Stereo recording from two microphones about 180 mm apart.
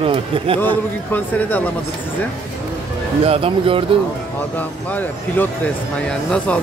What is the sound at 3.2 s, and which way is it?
Speech, 30° right (ahead or behind).